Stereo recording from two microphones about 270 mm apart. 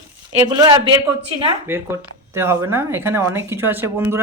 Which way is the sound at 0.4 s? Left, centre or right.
Centre.